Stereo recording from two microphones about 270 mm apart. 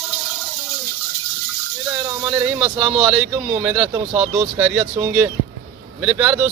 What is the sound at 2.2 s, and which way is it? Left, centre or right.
Speech, centre.